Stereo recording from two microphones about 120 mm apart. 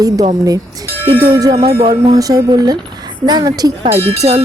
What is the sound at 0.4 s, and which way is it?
A woman's voice, 30° right (ahead or behind).